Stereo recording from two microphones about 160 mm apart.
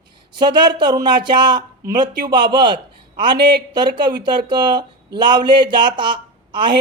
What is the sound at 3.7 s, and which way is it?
Speech, 30° right (ahead or behind).